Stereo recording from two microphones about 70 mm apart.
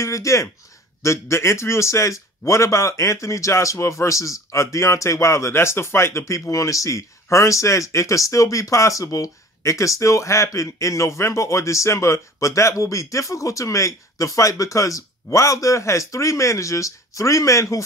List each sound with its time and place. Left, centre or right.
0.0 s speech: left